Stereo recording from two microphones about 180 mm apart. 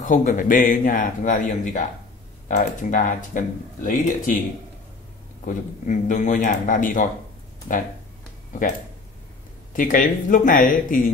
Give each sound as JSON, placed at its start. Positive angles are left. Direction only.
{"t": 0.0, "sound": "speech", "side_deg": 45}
{"t": 5.4, "sound": "speech", "side_deg": 45}
{"t": 9.8, "sound": "speech", "side_deg": 50}